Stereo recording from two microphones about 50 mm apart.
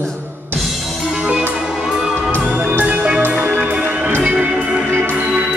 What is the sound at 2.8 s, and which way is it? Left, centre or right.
Music, right.